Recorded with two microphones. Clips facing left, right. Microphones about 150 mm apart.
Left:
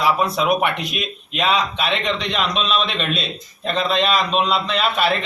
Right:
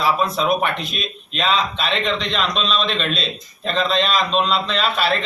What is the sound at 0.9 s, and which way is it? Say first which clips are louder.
A man's voice: left 2 dB; 15° left (ahead or behind).